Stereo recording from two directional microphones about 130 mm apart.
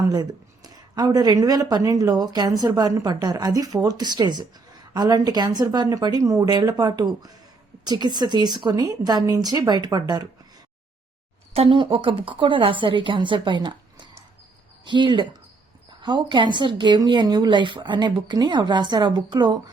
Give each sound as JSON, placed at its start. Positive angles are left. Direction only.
{"t": 0.0, "sound": "a woman's voice", "side_deg": -30}
{"t": 11.5, "sound": "a woman's voice", "side_deg": -45}